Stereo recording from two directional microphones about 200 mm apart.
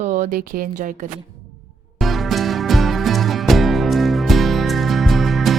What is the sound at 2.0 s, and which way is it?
Music, centre (ahead or behind).